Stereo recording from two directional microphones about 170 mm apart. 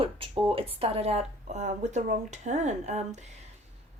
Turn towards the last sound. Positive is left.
turn(degrees=-45)  # may be behind; listen again after turning